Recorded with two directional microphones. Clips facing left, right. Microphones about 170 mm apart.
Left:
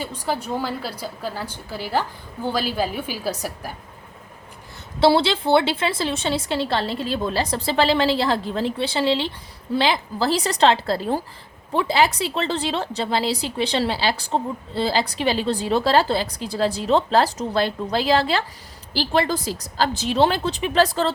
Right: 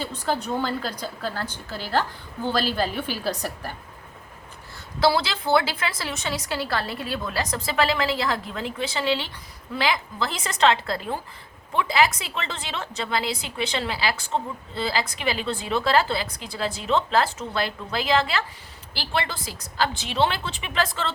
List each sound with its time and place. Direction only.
0.0 s a woman's voice: 10° left (ahead or behind)
4.9 s a woman's voice: 30° left (ahead or behind)